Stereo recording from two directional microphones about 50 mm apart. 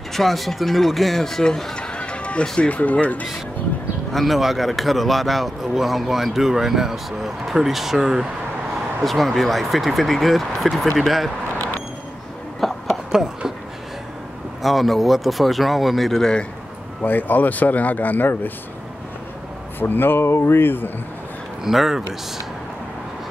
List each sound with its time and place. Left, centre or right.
0.1 s a man's voice: centre
1.4 s a sound: centre
2.4 s speech: centre
2.7 s speech: left
4.1 s a man's voice: centre
9.0 s a man's voice: centre
11.5 s vehicle: left
12.5 s a sound: centre
13.1 s speech: centre
14.6 s a man's voice: centre
17.0 s speech: left
19.8 s speech: left
21.6 s speech: centre